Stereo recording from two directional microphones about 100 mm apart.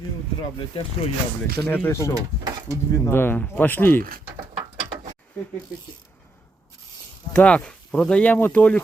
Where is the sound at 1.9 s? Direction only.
30° left (ahead or behind).